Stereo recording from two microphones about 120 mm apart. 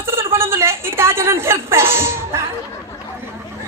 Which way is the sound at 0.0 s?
20° right (ahead or behind).